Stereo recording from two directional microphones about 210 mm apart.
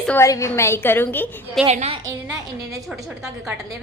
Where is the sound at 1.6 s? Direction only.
30° right (ahead or behind).